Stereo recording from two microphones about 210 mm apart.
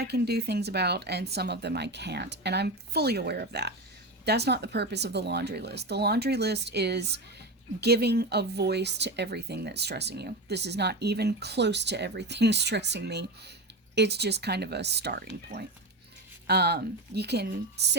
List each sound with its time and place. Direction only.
0.0 s speech: 50° right (ahead or behind)